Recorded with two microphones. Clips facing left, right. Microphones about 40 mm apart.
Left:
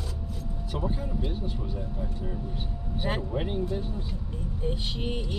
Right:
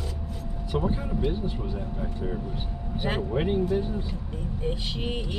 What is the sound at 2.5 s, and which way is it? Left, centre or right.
Speech, right.